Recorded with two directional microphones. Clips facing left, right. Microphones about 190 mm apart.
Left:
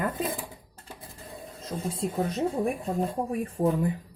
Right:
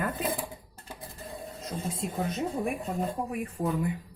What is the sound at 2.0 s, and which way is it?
Speech, 35° left (ahead or behind).